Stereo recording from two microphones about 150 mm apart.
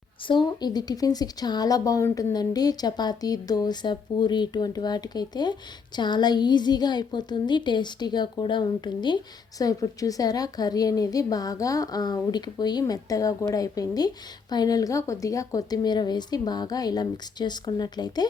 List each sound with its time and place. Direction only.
0.3 s speech: 30° left (ahead or behind)